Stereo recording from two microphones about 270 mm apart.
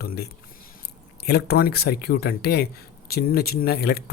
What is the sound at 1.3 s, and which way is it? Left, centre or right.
Speech, left.